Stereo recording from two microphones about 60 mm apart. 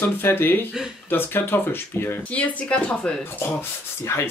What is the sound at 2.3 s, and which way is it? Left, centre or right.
Speech, left.